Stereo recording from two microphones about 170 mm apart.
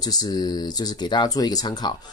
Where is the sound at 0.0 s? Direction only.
25° left (ahead or behind).